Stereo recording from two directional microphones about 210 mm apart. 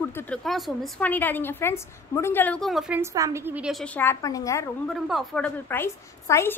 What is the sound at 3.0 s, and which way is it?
Speech, 15° right (ahead or behind).